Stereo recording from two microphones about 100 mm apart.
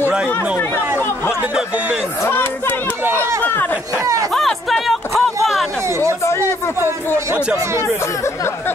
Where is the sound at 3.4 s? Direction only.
20° left (ahead or behind).